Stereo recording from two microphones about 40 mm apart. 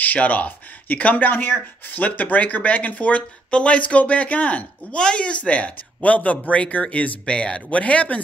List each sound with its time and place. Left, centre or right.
0.0 s speech: left
1.1 s speech: left
4.9 s speech: left
7.2 s speech: left